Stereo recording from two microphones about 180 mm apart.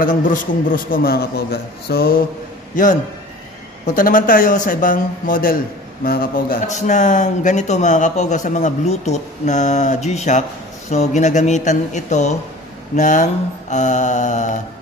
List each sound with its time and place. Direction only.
0.3 s a man's voice: 50° left (ahead or behind)
2.7 s a man's voice: 45° left (ahead or behind)